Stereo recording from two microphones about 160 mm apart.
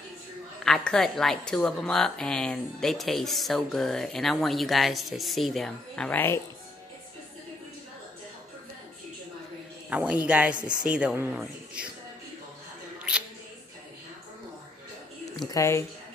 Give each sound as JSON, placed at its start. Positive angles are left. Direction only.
{"t": 0.7, "sound": "a woman's voice", "side_deg": 5}
{"t": 9.8, "sound": "a man's voice", "side_deg": -10}
{"t": 13.1, "sound": "a sound", "side_deg": -5}
{"t": 15.3, "sound": "speech", "side_deg": 20}